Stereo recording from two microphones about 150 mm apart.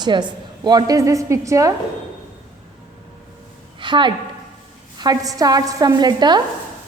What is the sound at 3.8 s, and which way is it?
A woman's voice, 30° right (ahead or behind).